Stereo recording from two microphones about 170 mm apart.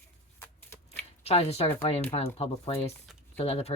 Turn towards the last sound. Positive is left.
turn(degrees=35)  # may be behind; listen again after turning